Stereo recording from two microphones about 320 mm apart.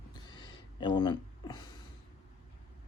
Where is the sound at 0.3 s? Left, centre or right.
Centre.